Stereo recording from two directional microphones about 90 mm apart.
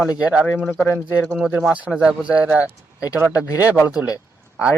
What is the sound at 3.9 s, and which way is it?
Speech, 10° right (ahead or behind).